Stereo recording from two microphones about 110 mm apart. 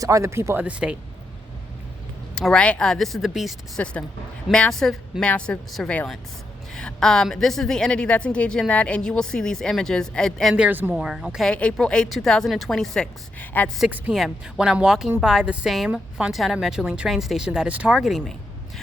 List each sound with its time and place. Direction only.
0.0 s speech: 30° right (ahead or behind)
0.6 s speech: 10° right (ahead or behind)
2.3 s a woman's voice: 5° left (ahead or behind)
3.8 s a woman's voice: 10° left (ahead or behind)
10.5 s speech: 15° right (ahead or behind)
10.9 s a woman's voice: 5° right (ahead or behind)
11.4 s a woman's voice: 10° left (ahead or behind)
13.4 s a woman's voice: 15° left (ahead or behind)
14.1 s a woman's voice: centre (ahead or behind)